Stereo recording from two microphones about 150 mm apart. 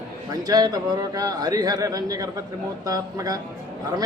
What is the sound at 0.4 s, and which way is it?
A man's voice, 25° right (ahead or behind).